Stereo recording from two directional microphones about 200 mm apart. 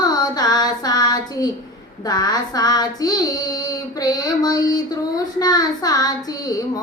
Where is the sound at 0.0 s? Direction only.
20° left (ahead or behind).